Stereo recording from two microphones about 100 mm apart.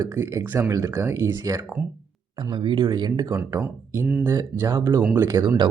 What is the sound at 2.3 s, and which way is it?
Speech, 50° right (ahead or behind).